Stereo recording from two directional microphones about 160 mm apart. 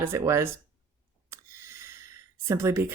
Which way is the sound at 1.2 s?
15° right (ahead or behind).